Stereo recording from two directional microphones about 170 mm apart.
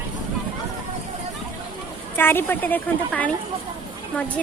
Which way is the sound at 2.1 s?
10° left (ahead or behind).